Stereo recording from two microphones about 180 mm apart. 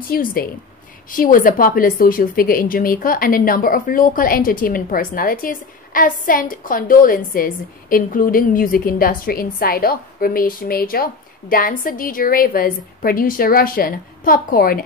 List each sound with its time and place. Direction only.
0.1 s a woman's voice: 55° left (ahead or behind)